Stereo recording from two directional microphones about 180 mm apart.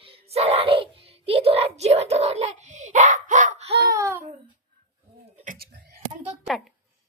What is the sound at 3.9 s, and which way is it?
Babbling, 15° right (ahead or behind).